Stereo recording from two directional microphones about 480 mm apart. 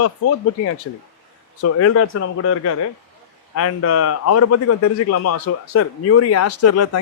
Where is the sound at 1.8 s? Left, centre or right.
Left.